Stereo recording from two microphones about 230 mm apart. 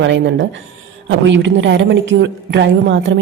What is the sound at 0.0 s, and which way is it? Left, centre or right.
A woman's voice, right.